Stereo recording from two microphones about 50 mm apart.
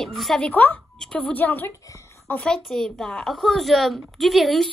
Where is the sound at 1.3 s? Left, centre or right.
Left.